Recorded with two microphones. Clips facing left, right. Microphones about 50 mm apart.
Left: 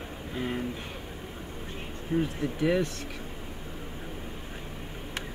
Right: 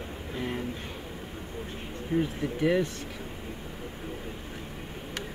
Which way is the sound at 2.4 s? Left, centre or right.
Centre.